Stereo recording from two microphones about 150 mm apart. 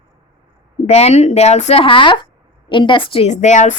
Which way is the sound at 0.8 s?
45° left (ahead or behind).